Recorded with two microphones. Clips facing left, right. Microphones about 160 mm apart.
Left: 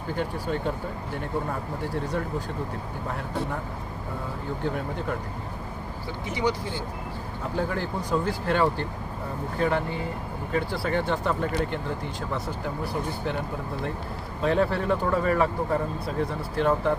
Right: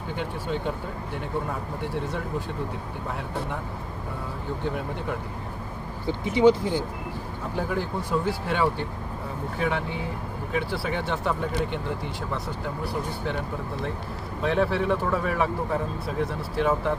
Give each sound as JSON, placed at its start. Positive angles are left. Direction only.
{"t": 0.2, "sound": "speech", "side_deg": 0}
{"t": 6.1, "sound": "speech", "side_deg": -25}
{"t": 7.7, "sound": "speech", "side_deg": -5}
{"t": 14.4, "sound": "speech", "side_deg": 0}